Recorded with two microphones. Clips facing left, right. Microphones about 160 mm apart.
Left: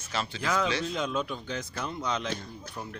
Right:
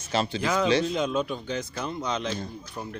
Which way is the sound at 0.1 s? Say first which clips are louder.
Right 5 dB; 25° right (ahead or behind).